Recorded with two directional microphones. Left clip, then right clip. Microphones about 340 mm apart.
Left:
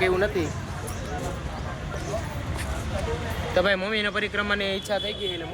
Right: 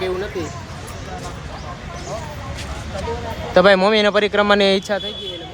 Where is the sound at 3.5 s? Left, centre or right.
Right.